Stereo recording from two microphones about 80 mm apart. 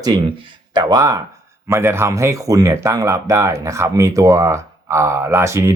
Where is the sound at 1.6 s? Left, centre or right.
Right.